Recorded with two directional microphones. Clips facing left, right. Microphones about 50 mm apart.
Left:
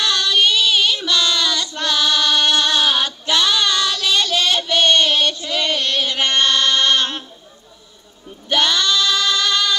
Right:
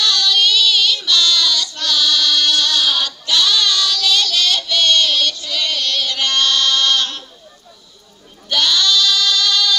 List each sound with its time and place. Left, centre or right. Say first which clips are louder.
0.0 s child singing: even; left
8.5 s female singing: even; left